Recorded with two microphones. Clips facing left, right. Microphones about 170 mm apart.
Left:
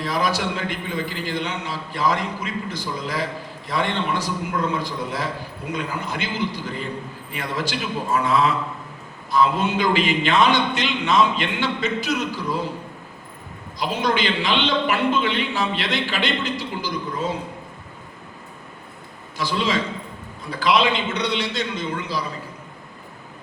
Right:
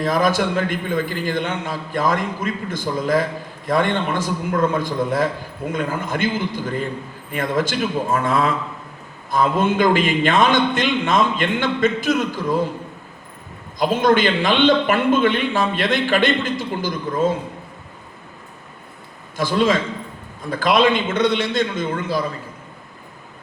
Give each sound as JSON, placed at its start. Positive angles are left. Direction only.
{"t": 0.0, "sound": "a man's voice", "side_deg": -50}
{"t": 13.7, "sound": "a man's voice", "side_deg": -50}
{"t": 19.4, "sound": "a man's voice", "side_deg": -50}